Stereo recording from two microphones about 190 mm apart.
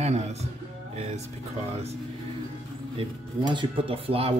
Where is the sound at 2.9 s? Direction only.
25° right (ahead or behind).